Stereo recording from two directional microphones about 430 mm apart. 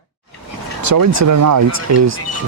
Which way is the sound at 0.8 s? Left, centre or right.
Right.